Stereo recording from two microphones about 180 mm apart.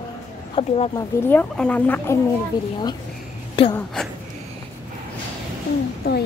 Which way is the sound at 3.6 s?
30° left (ahead or behind).